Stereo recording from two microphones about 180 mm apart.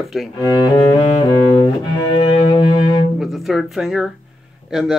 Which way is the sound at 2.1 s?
25° left (ahead or behind).